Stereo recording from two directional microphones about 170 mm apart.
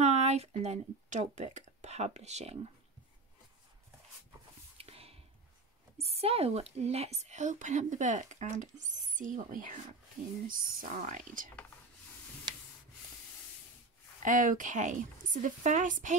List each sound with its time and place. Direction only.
0.0 s speech: 40° right (ahead or behind)
4.7 s a sound: 35° right (ahead or behind)
5.9 s speech: 35° right (ahead or behind)
14.2 s speech: 50° right (ahead or behind)